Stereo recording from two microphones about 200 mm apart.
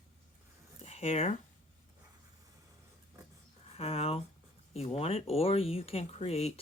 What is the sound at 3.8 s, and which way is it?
Speech, 30° left (ahead or behind).